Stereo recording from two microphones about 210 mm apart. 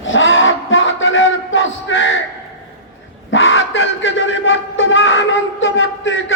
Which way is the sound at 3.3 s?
65° left (ahead or behind).